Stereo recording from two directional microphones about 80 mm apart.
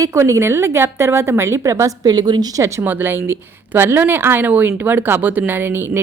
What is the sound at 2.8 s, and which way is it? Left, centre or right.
Speech, right.